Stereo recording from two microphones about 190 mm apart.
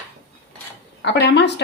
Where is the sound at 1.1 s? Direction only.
60° left (ahead or behind).